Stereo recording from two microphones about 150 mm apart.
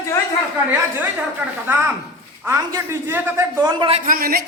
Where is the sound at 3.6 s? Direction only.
35° right (ahead or behind).